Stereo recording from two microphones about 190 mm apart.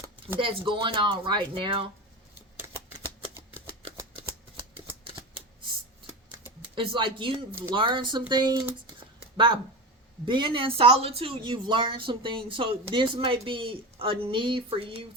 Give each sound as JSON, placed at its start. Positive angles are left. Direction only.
{"t": 0.3, "sound": "speech", "side_deg": -25}
{"t": 6.7, "sound": "speech", "side_deg": -25}
{"t": 9.2, "sound": "a sound", "side_deg": -30}
{"t": 10.2, "sound": "speech", "side_deg": -25}